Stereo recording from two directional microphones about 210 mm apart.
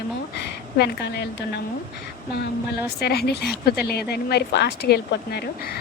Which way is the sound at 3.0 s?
50° left (ahead or behind).